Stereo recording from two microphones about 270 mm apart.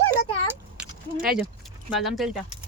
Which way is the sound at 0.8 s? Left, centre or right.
Centre.